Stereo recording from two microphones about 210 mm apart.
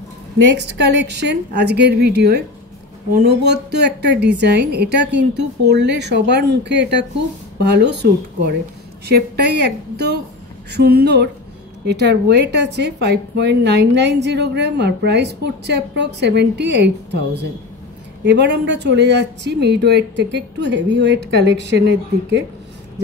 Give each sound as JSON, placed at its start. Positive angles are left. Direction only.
{"t": 0.5, "sound": "a woman's voice", "side_deg": -55}